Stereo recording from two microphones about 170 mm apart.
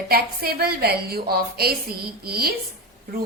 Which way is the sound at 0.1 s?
65° right (ahead or behind).